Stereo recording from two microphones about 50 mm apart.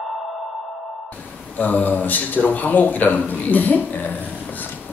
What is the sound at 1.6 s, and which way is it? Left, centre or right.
Speech, left.